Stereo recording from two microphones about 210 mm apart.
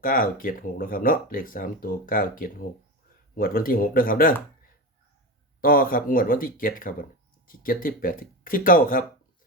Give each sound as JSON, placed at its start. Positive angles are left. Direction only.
{"t": 0.0, "sound": "speech", "side_deg": 40}
{"t": 5.6, "sound": "speech", "side_deg": 45}